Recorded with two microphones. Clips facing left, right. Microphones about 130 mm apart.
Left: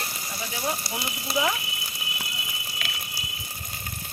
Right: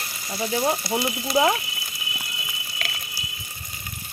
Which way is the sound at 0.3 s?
40° right (ahead or behind).